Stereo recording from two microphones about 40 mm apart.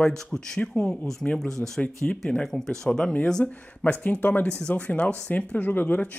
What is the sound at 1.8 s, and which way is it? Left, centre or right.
Speech, left.